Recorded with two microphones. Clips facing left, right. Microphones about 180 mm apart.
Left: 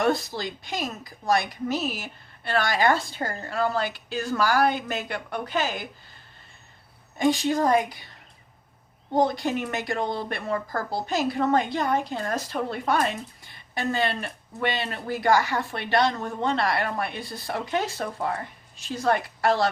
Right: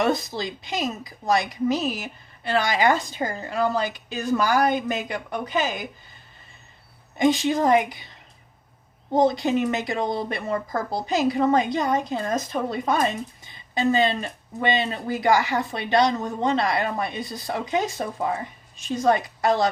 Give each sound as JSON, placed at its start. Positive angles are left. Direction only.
{"t": 0.0, "sound": "speech", "side_deg": -20}
{"t": 7.2, "sound": "speech", "side_deg": -20}
{"t": 9.1, "sound": "speech", "side_deg": -20}